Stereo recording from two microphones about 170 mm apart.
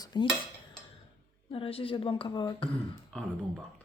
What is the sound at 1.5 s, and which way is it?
A woman's voice, 30° left (ahead or behind).